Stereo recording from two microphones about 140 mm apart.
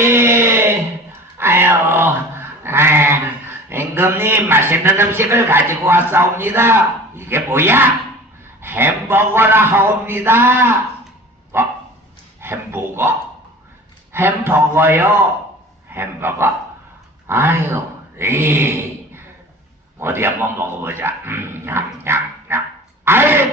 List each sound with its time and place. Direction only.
0.0 s a sound: 20° right (ahead or behind)
3.6 s a man's voice: 15° right (ahead or behind)
11.5 s dog: 15° right (ahead or behind)
12.4 s a man's voice: 15° right (ahead or behind)
14.1 s a man's voice: 15° right (ahead or behind)